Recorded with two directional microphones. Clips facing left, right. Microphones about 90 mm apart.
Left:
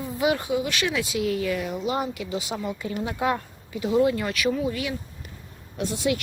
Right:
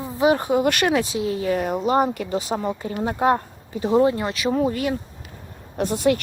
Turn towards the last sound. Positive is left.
turn(degrees=-45)  # may be behind; listen again after turning